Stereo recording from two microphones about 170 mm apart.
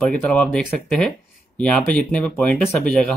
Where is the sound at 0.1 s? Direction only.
5° left (ahead or behind).